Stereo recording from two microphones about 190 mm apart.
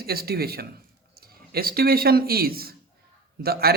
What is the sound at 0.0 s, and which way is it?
A man's voice, 55° right (ahead or behind).